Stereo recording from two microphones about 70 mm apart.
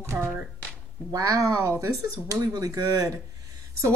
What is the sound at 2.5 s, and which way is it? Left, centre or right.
Speech, right.